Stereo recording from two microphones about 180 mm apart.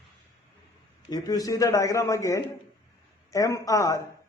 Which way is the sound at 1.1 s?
20° left (ahead or behind).